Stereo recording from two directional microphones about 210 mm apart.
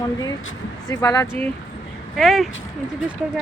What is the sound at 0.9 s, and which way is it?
Speech, 15° left (ahead or behind).